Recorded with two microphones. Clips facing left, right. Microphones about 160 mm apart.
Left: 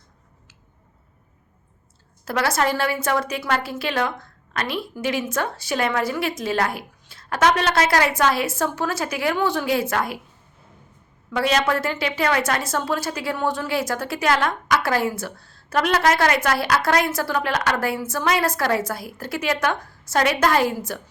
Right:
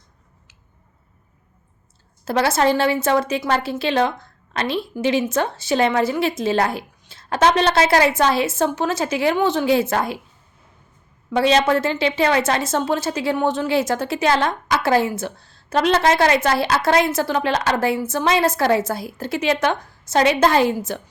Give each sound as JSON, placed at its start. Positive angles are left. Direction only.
{"t": 2.2, "sound": "a woman's voice", "side_deg": -25}
{"t": 11.3, "sound": "a woman's voice", "side_deg": -25}